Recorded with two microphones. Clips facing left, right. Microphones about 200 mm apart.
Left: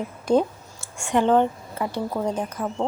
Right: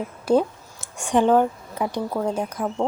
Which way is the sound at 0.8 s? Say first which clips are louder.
Right 2 dB; 15° right (ahead or behind).